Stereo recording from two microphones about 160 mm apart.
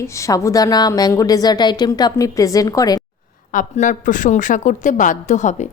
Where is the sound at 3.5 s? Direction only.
55° left (ahead or behind).